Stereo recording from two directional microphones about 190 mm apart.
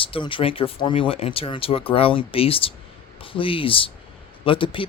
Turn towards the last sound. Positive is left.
turn(degrees=25)  # may be behind; listen again after turning